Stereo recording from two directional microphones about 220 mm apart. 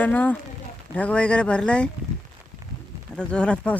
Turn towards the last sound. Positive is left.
turn(degrees=5)  # may be behind; listen again after turning